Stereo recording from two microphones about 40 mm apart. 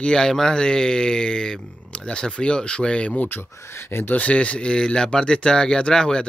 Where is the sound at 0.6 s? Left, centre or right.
Centre.